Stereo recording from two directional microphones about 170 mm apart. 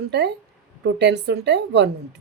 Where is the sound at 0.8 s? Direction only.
90° right.